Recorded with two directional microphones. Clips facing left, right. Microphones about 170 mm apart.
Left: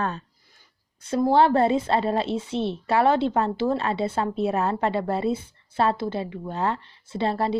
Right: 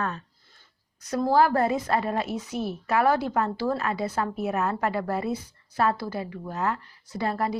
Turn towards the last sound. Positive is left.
turn(degrees=30)  # may be behind; listen again after turning